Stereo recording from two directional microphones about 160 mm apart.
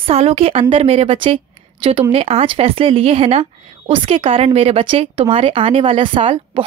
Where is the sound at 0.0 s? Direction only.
40° right (ahead or behind).